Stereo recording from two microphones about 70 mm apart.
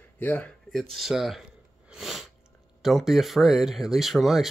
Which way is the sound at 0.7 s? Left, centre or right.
Centre.